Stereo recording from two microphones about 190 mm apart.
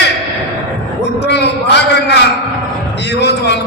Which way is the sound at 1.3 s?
60° left (ahead or behind).